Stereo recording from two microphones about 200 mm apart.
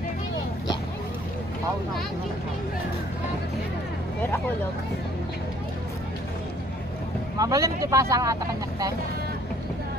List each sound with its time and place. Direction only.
7.3 s speech: 15° right (ahead or behind)